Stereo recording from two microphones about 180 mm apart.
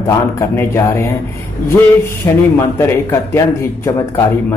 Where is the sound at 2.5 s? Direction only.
15° left (ahead or behind).